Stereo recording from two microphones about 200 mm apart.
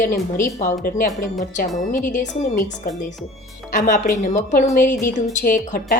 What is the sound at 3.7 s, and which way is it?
A woman's voice, 40° left (ahead or behind).